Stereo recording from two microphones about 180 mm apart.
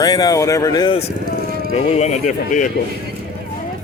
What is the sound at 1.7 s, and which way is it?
Speech, 35° left (ahead or behind).